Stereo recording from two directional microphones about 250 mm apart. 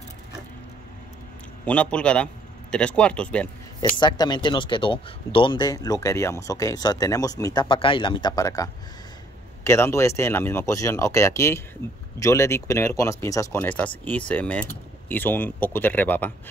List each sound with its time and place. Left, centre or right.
1.7 s a man's voice: centre
4.0 s speech: centre
9.7 s speech: centre